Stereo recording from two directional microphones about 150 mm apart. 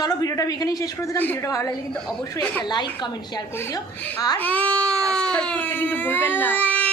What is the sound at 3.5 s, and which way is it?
A woman's voice, 15° left (ahead or behind).